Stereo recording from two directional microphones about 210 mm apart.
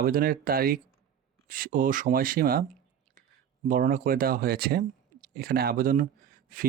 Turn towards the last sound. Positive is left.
turn(degrees=-40)  # may be behind; listen again after turning